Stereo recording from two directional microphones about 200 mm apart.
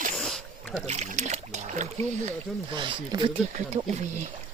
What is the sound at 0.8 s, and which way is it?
Trickle, 35° right (ahead or behind).